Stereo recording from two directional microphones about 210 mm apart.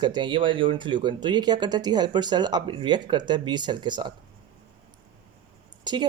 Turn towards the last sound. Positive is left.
turn(degrees=-20)  # may be behind; listen again after turning